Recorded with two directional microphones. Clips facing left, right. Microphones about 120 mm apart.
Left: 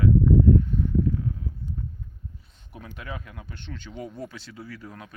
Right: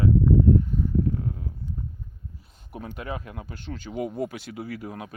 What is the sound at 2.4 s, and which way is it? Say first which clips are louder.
Speech: right 9 dB; 45° right (ahead or behind).